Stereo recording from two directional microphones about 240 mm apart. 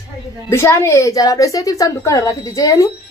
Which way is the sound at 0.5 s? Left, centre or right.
Centre.